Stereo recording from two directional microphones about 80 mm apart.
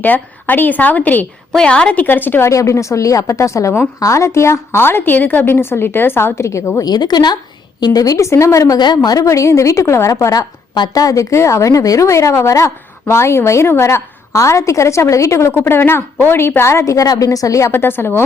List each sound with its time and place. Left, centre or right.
0.0 s a woman's voice: left
2.5 s a woman's voice: left
6.8 s a woman's voice: left
17.7 s a woman's voice: left